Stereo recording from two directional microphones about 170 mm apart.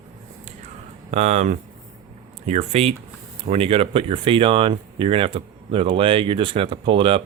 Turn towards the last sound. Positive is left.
turn(degrees=-30)  # may be behind; listen again after turning